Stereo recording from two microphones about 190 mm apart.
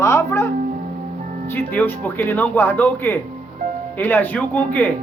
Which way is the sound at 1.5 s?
10° left (ahead or behind).